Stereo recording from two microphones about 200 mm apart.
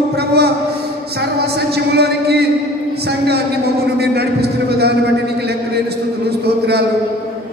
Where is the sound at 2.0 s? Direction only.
55° right (ahead or behind).